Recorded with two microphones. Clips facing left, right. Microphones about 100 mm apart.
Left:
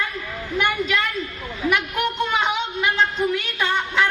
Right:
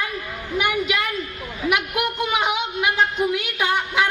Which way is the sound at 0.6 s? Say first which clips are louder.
Even; 10° right (ahead or behind).